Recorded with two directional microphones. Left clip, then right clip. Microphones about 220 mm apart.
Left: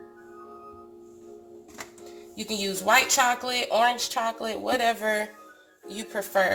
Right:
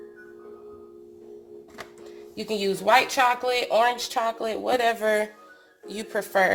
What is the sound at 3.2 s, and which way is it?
Speech, 35° right (ahead or behind).